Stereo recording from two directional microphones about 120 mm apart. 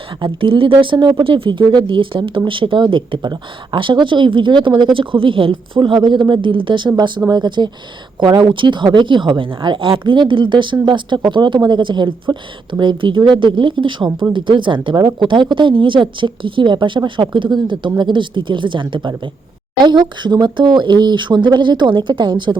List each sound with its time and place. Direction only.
0.2 s speech: 45° right (ahead or behind)